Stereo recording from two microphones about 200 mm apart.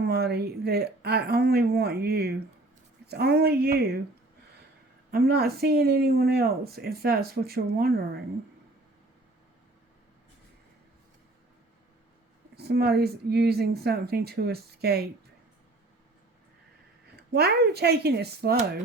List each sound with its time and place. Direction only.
0.0 s speech: 50° right (ahead or behind)
5.1 s speech: 50° right (ahead or behind)
12.5 s speech: 50° right (ahead or behind)
17.3 s speech: 50° right (ahead or behind)